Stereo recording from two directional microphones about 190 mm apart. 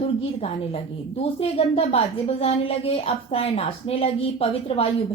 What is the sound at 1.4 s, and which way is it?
Speech, 30° left (ahead or behind).